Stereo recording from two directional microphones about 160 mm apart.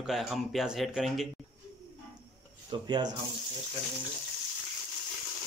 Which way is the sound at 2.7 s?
25° right (ahead or behind).